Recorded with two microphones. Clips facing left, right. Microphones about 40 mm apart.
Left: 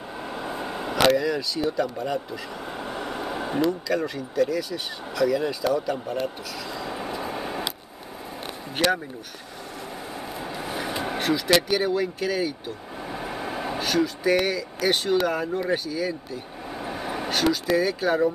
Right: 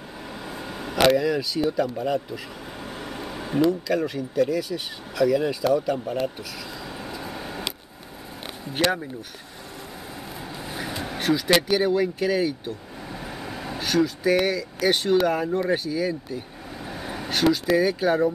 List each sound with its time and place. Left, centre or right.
0.3 s vehicle: centre
0.9 s speech: centre
2.8 s a sound: centre
3.6 s speech: centre
6.9 s vehicle: centre
8.7 s speech: centre
10.4 s vehicle: centre
11.2 s speech: centre
13.1 s vehicle: centre
13.7 s speech: centre
16.8 s vehicle: centre
17.3 s speech: centre